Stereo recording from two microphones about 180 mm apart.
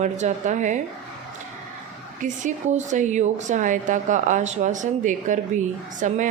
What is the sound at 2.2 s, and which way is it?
A woman's voice, 45° right (ahead or behind).